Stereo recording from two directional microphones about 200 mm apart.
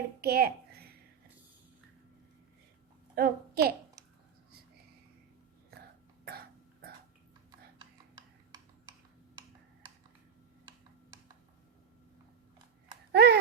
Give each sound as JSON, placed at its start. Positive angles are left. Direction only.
{"t": 0.2, "sound": "a sound", "side_deg": -50}
{"t": 3.2, "sound": "a woman's voice", "side_deg": -50}
{"t": 13.1, "sound": "speech", "side_deg": -55}